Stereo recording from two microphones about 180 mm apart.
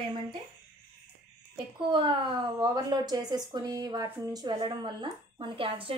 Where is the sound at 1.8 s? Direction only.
25° right (ahead or behind).